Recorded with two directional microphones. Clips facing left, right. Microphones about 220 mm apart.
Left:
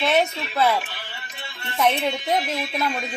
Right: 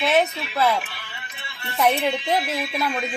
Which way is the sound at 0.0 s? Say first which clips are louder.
Right 1 dB; centre (ahead or behind).